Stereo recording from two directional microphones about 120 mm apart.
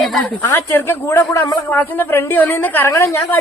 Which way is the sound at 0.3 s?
20° left (ahead or behind).